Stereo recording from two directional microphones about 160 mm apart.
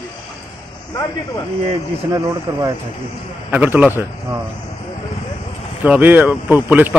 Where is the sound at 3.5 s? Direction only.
10° right (ahead or behind).